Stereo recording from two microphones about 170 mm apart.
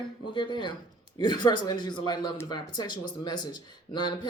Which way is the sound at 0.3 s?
25° left (ahead or behind).